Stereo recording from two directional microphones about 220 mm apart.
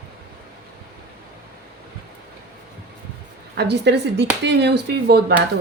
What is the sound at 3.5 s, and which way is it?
Speech, 50° right (ahead or behind).